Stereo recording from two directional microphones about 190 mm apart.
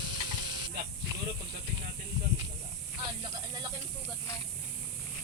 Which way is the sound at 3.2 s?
20° right (ahead or behind).